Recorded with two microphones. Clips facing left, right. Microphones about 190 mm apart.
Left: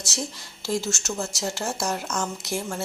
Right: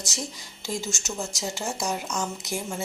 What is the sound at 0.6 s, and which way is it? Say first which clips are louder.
Speech: left 4 dB; 15° right (ahead or behind).